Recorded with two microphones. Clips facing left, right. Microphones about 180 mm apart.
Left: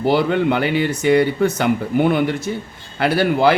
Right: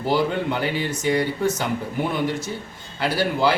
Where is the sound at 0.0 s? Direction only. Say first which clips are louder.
Left 5 dB; 65° left (ahead or behind).